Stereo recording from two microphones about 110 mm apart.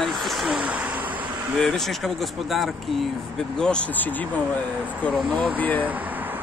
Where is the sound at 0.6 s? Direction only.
10° right (ahead or behind).